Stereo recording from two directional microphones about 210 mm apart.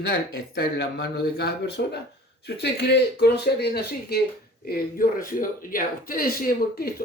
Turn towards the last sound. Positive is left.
turn(degrees=45)  # may be behind; listen again after turning